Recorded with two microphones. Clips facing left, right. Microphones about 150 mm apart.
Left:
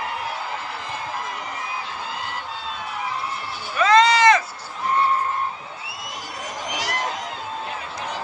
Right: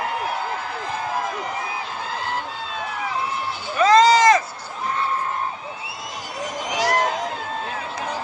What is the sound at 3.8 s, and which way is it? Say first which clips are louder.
Run: right 2 dB; 35° right (ahead or behind).